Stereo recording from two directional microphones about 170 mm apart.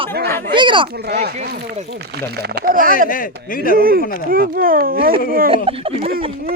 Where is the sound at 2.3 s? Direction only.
70° right (ahead or behind); by 3.0 s 55° right (ahead or behind).